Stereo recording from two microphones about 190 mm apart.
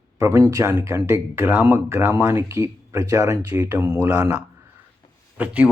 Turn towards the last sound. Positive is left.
turn(degrees=-10)  # may be behind; listen again after turning